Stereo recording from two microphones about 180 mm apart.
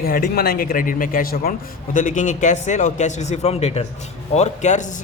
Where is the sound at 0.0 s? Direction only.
55° left (ahead or behind).